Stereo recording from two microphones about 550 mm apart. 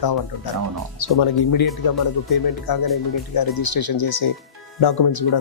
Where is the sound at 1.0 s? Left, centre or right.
Left.